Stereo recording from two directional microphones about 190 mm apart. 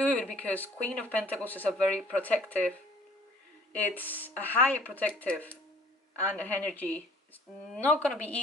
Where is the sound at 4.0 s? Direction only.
10° left (ahead or behind).